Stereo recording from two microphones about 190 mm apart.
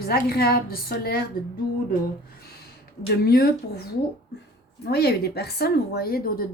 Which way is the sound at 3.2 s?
55° left (ahead or behind).